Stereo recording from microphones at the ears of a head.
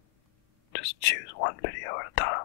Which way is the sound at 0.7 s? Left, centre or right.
Left.